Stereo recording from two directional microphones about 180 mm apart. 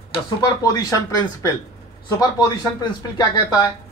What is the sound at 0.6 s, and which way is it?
Speech, 20° left (ahead or behind).